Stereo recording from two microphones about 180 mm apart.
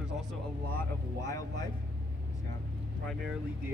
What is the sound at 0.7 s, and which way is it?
Speech, 15° left (ahead or behind).